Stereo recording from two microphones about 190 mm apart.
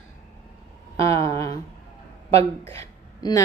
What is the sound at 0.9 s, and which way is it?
Speech, 15° left (ahead or behind).